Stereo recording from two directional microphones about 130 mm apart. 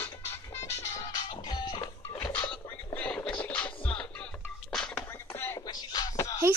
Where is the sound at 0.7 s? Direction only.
30° left (ahead or behind).